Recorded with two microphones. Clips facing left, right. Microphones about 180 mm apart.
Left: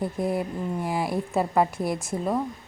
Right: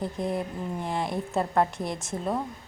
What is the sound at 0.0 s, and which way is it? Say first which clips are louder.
A woman's voice: left 3 dB; 5° left (ahead or behind).